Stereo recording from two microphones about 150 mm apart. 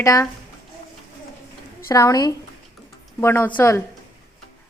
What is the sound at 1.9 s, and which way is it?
A woman's voice, 25° left (ahead or behind).